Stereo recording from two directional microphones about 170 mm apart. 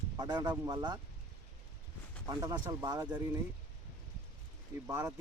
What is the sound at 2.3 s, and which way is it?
Speech, 20° right (ahead or behind).